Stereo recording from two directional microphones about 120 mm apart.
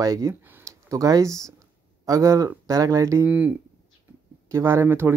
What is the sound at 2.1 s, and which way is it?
Speech, 30° right (ahead or behind).